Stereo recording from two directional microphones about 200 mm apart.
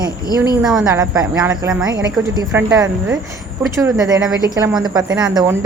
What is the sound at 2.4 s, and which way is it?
Speech, 15° right (ahead or behind).